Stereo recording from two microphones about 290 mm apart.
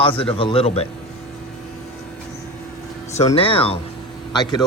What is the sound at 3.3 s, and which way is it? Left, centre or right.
A man's voice, centre.